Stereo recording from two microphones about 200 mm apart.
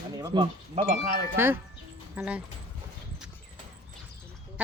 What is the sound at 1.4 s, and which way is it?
Speech, 10° right (ahead or behind).